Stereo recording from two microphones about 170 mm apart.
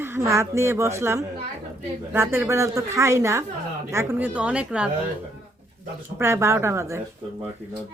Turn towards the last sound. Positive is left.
turn(degrees=-15)  # may be behind; listen again after turning